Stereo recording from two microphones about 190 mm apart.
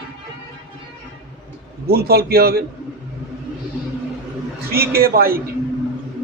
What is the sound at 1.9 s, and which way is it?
Speech, 55° right (ahead or behind).